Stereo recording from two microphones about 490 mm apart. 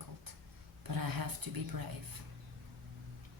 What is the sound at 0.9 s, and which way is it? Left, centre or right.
Speech, right.